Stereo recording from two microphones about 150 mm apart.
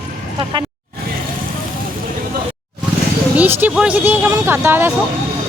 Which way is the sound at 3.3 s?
15° right (ahead or behind).